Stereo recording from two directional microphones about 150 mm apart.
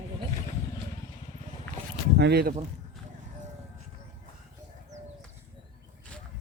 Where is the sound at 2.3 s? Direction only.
90° right.